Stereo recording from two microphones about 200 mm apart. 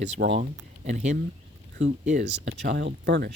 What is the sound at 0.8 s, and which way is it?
Speech, 35° right (ahead or behind).